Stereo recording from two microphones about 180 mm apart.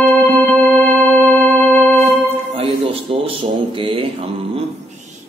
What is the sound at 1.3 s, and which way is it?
Music, 10° left (ahead or behind).